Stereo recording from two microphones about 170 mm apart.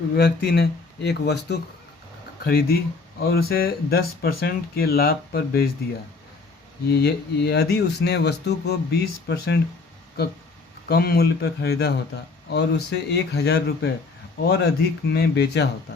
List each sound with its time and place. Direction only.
0.2 s speech: 65° left (ahead or behind)
2.4 s speech: 60° left (ahead or behind)
6.8 s speech: 70° left (ahead or behind)
10.8 s speech: 65° left (ahead or behind)